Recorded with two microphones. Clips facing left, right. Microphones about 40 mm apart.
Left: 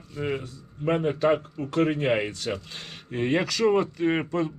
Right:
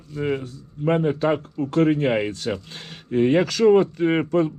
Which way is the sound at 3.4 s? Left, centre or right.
Right.